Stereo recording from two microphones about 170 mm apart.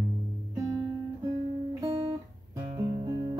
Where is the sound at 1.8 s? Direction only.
30° right (ahead or behind).